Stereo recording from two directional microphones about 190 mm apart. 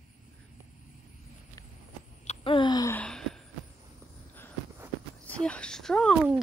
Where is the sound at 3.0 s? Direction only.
5° left (ahead or behind).